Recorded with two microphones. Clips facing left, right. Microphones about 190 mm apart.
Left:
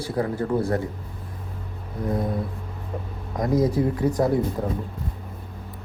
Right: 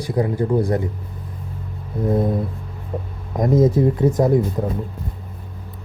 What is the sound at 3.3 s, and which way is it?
Speech, 25° right (ahead or behind).